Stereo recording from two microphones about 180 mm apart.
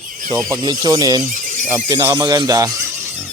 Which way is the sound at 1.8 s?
15° right (ahead or behind).